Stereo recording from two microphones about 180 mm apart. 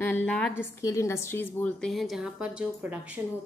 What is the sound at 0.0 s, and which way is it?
A woman's voice, 10° left (ahead or behind).